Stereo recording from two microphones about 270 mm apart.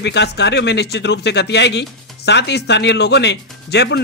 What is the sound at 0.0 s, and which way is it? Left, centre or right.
Speech, left.